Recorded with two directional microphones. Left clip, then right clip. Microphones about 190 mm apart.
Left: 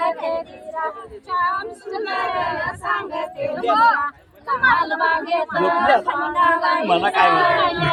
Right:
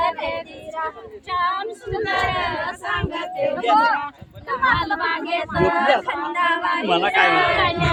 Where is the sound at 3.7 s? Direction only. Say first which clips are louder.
Left 2 dB; 70° left (ahead or behind).